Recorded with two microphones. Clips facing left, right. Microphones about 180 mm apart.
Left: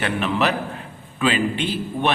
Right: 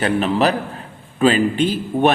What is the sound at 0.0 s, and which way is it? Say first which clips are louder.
A man's voice: right 5 dB; 35° right (ahead or behind).